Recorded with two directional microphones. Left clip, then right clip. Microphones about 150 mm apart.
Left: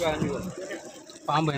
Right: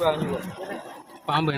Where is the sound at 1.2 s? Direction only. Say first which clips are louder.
Right 2 dB; 5° right (ahead or behind).